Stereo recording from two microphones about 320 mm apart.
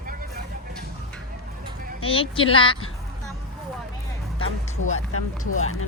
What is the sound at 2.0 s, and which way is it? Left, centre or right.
Speech, centre.